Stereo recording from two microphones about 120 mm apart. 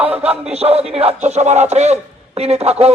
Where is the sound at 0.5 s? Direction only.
60° right (ahead or behind).